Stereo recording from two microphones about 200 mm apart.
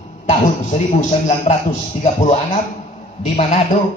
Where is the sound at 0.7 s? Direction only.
35° left (ahead or behind).